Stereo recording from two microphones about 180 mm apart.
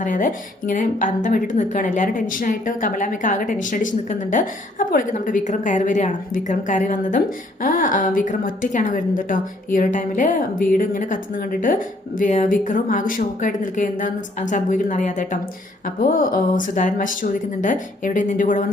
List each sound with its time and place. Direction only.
0.0 s a woman's voice: 45° left (ahead or behind)